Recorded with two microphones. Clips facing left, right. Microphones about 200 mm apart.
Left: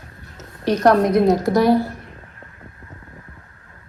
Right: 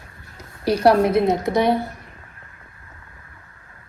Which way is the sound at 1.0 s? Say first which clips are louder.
Left 2 dB; 5° right (ahead or behind).